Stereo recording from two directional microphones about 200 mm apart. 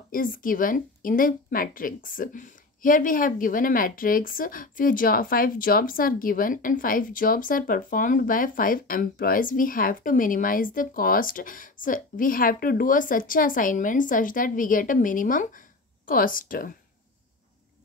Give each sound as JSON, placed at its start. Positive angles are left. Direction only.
{"t": 0.1, "sound": "a woman's voice", "side_deg": 45}